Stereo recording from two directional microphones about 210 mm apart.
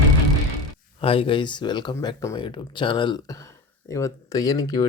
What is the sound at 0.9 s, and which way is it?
Speech, 25° left (ahead or behind).